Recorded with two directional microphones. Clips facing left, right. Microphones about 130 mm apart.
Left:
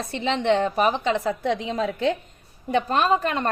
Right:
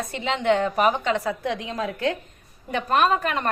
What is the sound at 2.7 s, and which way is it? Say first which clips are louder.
Speech: even; 30° left (ahead or behind).